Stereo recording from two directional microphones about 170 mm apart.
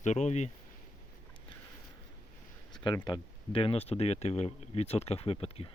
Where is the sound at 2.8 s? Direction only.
25° left (ahead or behind).